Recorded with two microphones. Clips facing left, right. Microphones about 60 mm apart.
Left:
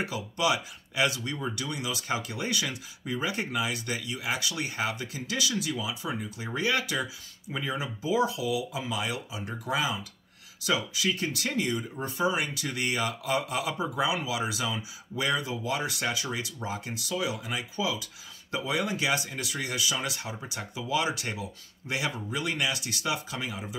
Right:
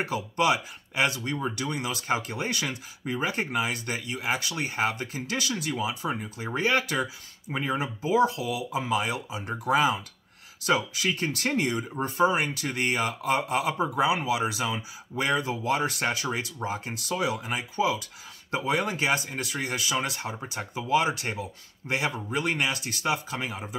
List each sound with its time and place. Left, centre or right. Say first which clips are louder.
0.0 s speech: right 3 dB; right
17.0 s speech: right 3 dB; right